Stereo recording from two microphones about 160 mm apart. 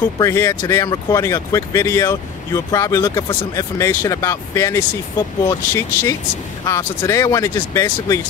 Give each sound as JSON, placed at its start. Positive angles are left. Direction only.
{"t": 0.2, "sound": "speech", "side_deg": 20}